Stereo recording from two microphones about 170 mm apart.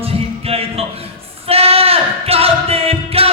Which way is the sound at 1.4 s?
35° right (ahead or behind).